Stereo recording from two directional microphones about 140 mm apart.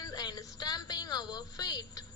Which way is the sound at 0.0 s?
25° left (ahead or behind).